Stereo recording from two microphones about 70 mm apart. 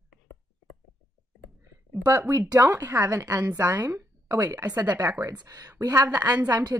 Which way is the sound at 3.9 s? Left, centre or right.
Right.